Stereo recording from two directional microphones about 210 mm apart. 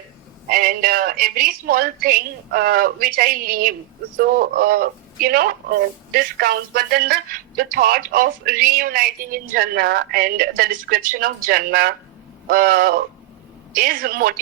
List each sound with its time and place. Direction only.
0.4 s speech: 45° right (ahead or behind)